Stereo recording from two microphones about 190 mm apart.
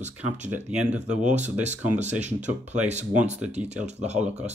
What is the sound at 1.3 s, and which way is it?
Speech, 35° right (ahead or behind).